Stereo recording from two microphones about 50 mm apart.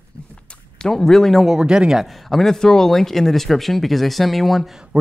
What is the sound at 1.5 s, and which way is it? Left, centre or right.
Speech, centre.